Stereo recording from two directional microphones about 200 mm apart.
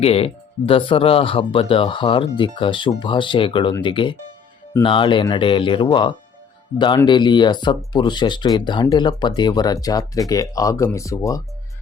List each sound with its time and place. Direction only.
0.0 s speech: 30° left (ahead or behind)